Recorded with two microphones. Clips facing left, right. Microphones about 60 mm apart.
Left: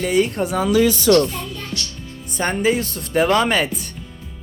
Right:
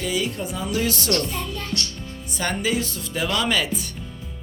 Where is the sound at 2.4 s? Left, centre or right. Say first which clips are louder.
Left 5 dB; left.